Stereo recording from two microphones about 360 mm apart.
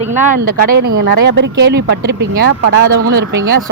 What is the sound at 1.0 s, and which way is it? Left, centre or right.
Speech, right.